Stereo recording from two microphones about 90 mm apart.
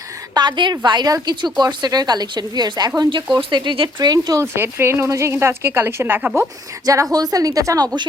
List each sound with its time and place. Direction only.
0.3 s speech: 55° right (ahead or behind)
4.5 s speech: 25° right (ahead or behind)
6.8 s speech: 40° right (ahead or behind)